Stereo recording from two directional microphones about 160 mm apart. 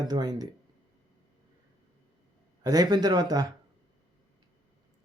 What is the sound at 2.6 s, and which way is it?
Speech, 25° right (ahead or behind).